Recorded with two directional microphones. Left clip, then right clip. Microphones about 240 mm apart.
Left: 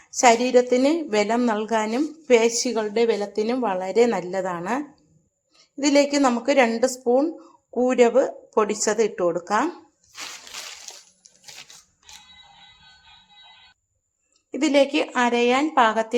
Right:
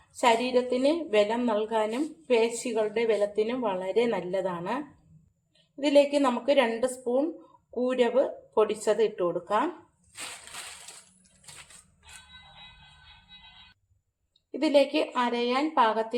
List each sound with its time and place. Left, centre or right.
0.2 s a woman's voice: left
5.8 s a woman's voice: left
14.5 s a woman's voice: left